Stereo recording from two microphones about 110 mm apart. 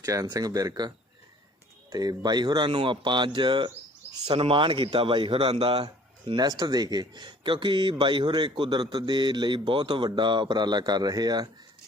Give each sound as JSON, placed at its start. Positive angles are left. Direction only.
{"t": 0.0, "sound": "speech", "side_deg": -30}
{"t": 5.8, "sound": "speech", "side_deg": -40}